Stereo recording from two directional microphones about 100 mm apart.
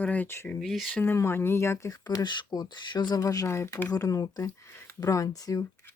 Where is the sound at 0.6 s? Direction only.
Centre (ahead or behind).